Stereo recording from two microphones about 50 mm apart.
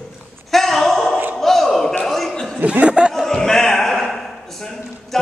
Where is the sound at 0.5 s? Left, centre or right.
Centre.